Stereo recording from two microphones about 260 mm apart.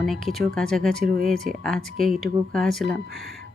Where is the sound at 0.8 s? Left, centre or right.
Right.